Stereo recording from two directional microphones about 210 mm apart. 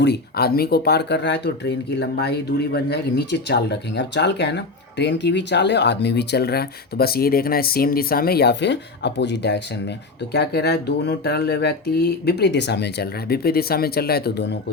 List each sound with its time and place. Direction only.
0.0 s speech: 50° left (ahead or behind)